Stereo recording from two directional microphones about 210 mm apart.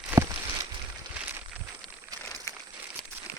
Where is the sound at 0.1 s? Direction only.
15° right (ahead or behind).